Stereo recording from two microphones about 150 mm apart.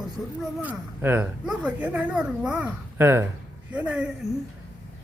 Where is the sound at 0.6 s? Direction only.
10° right (ahead or behind).